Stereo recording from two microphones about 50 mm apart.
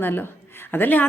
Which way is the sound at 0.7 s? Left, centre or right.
Left.